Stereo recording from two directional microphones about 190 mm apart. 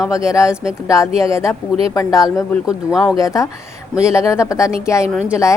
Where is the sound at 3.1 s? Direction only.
15° left (ahead or behind).